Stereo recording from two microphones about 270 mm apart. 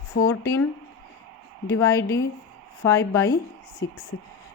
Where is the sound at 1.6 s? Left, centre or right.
Centre.